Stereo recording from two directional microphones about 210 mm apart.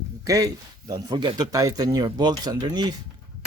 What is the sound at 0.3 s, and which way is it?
Speech, 15° right (ahead or behind).